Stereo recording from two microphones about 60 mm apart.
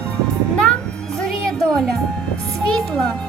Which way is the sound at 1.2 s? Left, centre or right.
Centre.